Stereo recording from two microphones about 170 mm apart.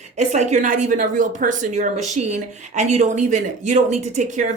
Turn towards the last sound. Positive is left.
turn(degrees=-45)  # may be behind; listen again after turning